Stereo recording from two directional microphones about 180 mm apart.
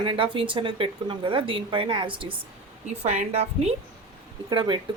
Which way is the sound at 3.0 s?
40° right (ahead or behind).